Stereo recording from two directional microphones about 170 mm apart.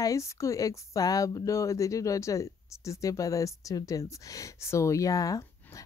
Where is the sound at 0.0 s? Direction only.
20° left (ahead or behind).